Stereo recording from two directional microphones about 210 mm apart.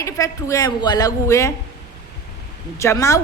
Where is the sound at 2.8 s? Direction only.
15° left (ahead or behind).